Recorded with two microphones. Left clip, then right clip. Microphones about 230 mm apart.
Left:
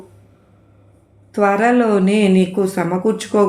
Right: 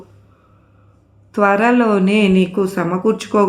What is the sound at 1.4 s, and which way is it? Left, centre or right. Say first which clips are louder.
Speech: right 1 dB; centre.